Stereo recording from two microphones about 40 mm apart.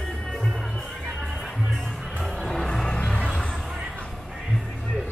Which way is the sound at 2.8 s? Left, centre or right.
Left.